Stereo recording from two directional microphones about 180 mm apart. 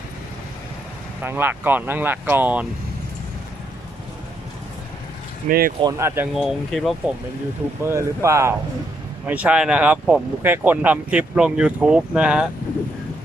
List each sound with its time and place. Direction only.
1.2 s speech: 10° right (ahead or behind)
5.8 s speech: 20° right (ahead or behind)
6.3 s speech: centre (ahead or behind)
7.8 s speech: 15° right (ahead or behind)